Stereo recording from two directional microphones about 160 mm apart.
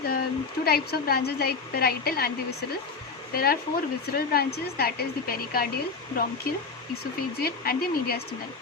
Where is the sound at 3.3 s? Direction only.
70° left (ahead or behind).